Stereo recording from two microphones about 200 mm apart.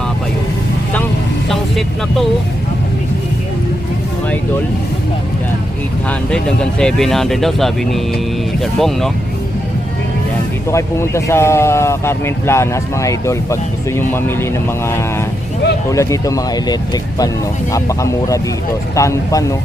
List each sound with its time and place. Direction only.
1.5 s vehicle: centre (ahead or behind)
6.1 s speech: 5° left (ahead or behind)
10.7 s speech: 15° left (ahead or behind)